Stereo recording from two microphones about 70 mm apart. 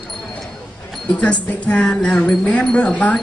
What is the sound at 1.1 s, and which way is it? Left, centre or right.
A woman's voice, left.